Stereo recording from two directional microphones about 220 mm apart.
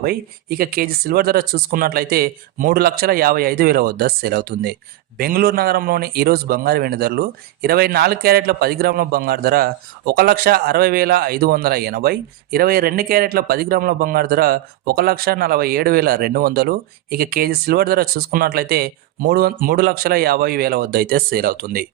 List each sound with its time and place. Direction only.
0.0 s speech: 45° right (ahead or behind)